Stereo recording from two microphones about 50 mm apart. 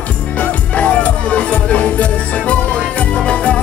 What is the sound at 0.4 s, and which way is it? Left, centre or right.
Music, left.